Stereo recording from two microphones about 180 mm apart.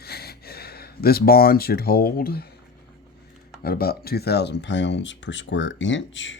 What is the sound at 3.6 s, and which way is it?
Speech, 55° left (ahead or behind).